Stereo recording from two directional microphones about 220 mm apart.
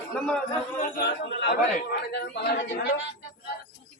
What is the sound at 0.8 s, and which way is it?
A man's voice, 45° left (ahead or behind).